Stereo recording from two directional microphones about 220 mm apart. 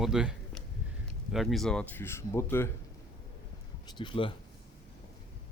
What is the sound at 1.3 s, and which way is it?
Speech, centre (ahead or behind).